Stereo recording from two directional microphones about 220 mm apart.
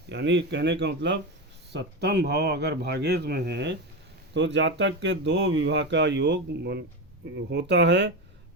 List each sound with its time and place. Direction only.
0.1 s speech: 55° right (ahead or behind)